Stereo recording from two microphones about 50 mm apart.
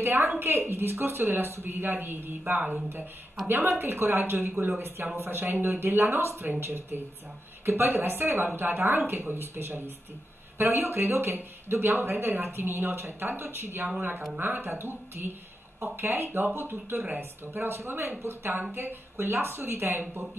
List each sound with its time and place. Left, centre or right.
0.0 s a woman's voice: right